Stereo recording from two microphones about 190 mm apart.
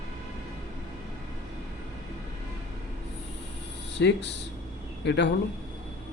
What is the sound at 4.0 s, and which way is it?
Speech, 65° left (ahead or behind).